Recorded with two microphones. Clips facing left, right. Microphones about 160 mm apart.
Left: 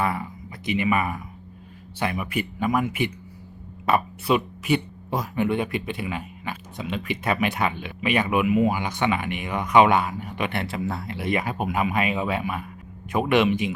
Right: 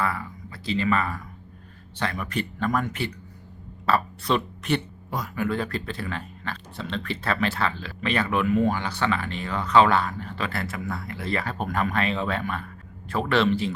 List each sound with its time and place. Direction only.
0.0 s speech: 20° left (ahead or behind)
4.3 s speech: 10° left (ahead or behind)
5.1 s speech: 25° left (ahead or behind)